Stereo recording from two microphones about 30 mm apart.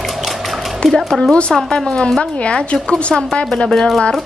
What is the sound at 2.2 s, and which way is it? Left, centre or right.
Speech, left.